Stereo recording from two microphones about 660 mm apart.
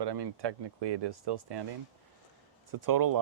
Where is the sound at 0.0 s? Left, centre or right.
Right.